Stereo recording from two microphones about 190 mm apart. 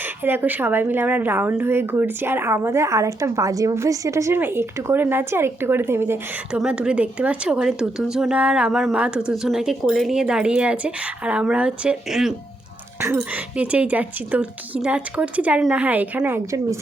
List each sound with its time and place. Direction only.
0.0 s a woman's voice: 10° right (ahead or behind)